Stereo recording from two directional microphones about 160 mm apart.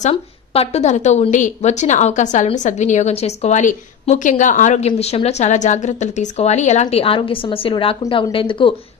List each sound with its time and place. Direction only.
0.0 s a woman's voice: 40° left (ahead or behind)